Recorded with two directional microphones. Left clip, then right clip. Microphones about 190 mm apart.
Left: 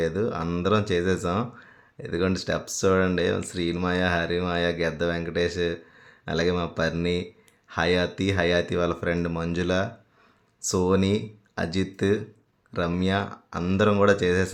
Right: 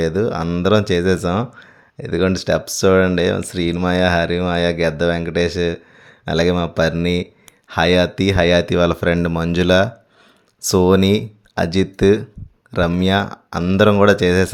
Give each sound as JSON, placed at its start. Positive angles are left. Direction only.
{"t": 0.0, "sound": "speech", "side_deg": -40}